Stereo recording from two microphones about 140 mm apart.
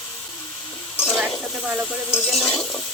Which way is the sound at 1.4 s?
5° right (ahead or behind).